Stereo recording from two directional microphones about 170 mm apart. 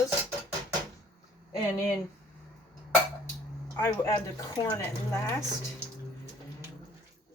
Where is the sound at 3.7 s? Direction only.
15° left (ahead or behind).